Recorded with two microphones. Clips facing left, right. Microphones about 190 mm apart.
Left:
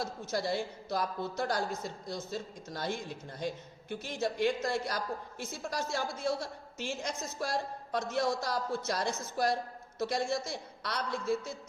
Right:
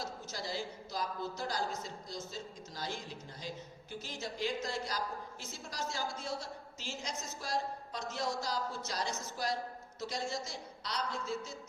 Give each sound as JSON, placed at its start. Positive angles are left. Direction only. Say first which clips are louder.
{"t": 0.0, "sound": "a woman's voice", "louder": "left 8 dB", "side_deg": 60}